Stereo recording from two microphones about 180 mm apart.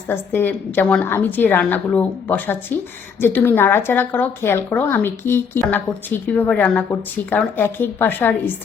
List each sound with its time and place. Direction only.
0.1 s speech: 10° left (ahead or behind)